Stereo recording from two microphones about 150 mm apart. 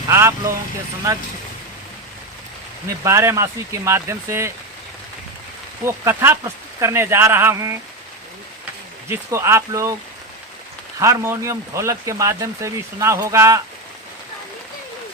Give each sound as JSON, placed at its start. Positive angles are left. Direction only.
{"t": 0.1, "sound": "speech", "side_deg": -20}
{"t": 3.0, "sound": "speech", "side_deg": -20}
{"t": 5.8, "sound": "speech", "side_deg": -15}
{"t": 9.0, "sound": "speech", "side_deg": -20}
{"t": 11.0, "sound": "speech", "side_deg": -20}